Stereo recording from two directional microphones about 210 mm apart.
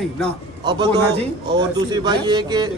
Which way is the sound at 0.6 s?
20° right (ahead or behind).